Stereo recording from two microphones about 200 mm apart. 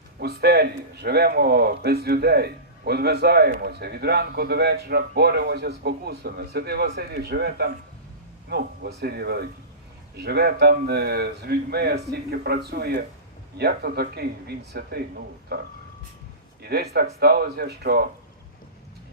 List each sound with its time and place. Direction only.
0.2 s a man's voice: 55° right (ahead or behind)
16.6 s a man's voice: 55° right (ahead or behind)